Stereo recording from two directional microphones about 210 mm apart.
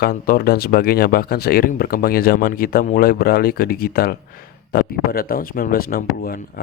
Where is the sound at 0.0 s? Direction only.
45° left (ahead or behind).